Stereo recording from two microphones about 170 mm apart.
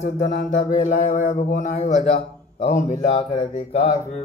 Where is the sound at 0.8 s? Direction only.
45° left (ahead or behind).